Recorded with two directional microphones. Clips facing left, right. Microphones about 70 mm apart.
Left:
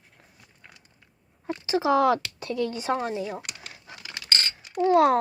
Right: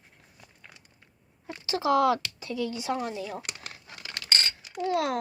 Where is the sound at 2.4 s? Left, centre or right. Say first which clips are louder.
Left 3 dB; left.